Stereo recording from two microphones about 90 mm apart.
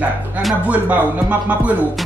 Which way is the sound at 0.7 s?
15° right (ahead or behind).